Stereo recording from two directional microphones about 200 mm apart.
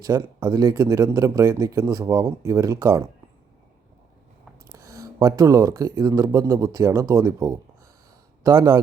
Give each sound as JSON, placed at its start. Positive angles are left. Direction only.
{"t": 0.0, "sound": "speech", "side_deg": -15}
{"t": 4.6, "sound": "speech", "side_deg": -15}